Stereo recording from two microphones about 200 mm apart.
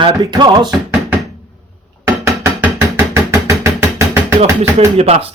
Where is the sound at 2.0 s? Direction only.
15° right (ahead or behind).